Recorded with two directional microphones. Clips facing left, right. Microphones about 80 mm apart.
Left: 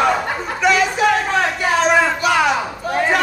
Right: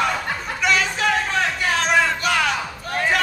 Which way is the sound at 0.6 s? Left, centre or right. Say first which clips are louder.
Left 5 dB; centre.